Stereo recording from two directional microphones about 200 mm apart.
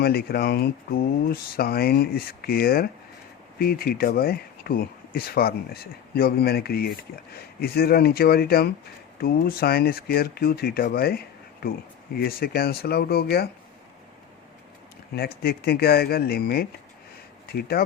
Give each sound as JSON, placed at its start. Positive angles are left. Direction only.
{"t": 0.0, "sound": "speech", "side_deg": 50}
{"t": 15.4, "sound": "speech", "side_deg": 50}